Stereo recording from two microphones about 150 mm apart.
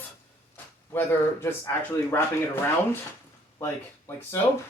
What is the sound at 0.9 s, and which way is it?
Speech, 15° left (ahead or behind).